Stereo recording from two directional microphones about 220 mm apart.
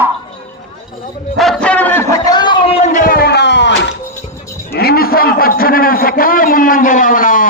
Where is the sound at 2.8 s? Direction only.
35° left (ahead or behind); by 3.9 s 50° left (ahead or behind).